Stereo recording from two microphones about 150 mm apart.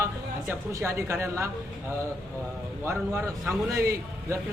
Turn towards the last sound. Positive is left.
turn(degrees=-20)  # may be behind; listen again after turning